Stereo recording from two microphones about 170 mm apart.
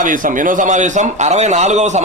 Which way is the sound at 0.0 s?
50° right (ahead or behind).